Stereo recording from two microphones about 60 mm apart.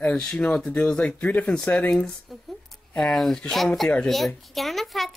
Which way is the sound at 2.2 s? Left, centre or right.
Centre.